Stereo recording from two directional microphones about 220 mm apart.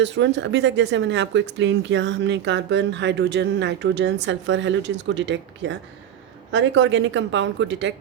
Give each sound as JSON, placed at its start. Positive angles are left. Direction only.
{"t": 0.0, "sound": "a woman's voice", "side_deg": -55}